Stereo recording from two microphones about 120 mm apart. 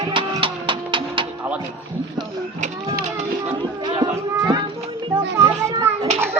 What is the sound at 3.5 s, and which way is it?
Music, 40° right (ahead or behind).